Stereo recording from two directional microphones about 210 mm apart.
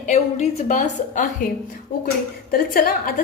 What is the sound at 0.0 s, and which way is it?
A woman's voice, 35° left (ahead or behind).